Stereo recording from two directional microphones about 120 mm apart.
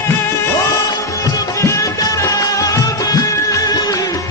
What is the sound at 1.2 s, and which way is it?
Music, 30° left (ahead or behind).